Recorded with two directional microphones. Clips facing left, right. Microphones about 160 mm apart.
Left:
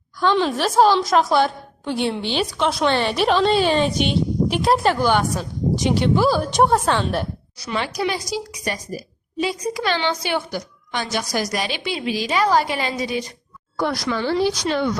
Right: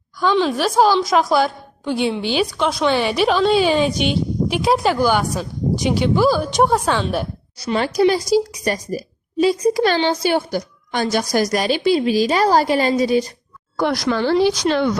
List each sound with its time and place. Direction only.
0.2 s a woman's voice: 5° right (ahead or behind)
7.6 s speech: 35° right (ahead or behind)
13.7 s speech: 80° right
14.1 s speech: 70° right (ahead or behind); by 14.9 s 90° right